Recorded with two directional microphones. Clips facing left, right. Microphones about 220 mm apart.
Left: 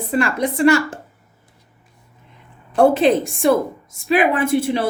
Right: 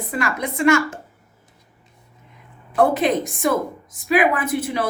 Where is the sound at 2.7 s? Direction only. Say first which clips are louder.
Left 4 dB; 30° left (ahead or behind).